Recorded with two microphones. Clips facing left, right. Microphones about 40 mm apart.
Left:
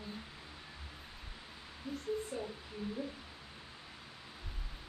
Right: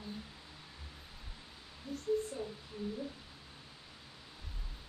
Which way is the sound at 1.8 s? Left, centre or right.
Centre.